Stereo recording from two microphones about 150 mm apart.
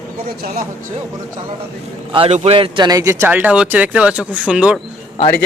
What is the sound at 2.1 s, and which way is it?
A man's voice, 45° right (ahead or behind).